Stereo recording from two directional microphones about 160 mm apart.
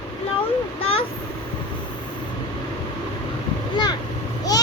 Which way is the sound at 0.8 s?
35° left (ahead or behind).